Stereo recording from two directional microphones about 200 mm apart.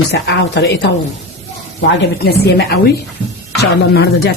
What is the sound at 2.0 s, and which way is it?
A woman's voice, 55° left (ahead or behind).